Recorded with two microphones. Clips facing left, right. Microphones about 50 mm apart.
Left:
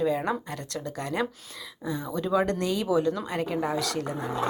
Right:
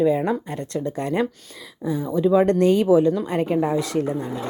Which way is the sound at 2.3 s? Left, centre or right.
Right.